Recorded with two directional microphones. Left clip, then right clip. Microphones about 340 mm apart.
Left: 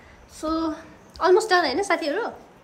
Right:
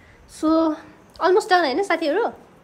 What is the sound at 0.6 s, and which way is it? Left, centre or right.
A woman's voice, centre.